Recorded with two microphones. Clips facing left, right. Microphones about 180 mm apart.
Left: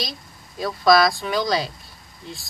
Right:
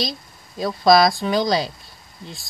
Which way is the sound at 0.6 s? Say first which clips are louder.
Right 2 dB; 30° right (ahead or behind).